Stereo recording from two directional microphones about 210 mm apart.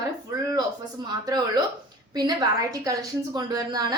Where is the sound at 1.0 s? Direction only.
20° right (ahead or behind).